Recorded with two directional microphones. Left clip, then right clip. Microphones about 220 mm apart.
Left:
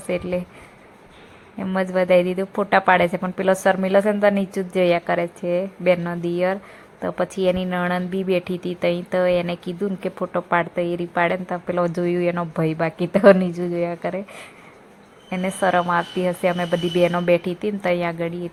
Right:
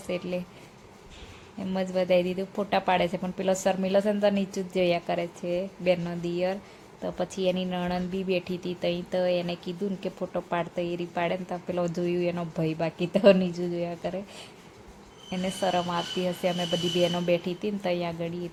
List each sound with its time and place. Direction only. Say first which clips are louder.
0.1 s speech: left 7 dB; 15° left (ahead or behind)
1.5 s speech: left 7 dB; 15° left (ahead or behind)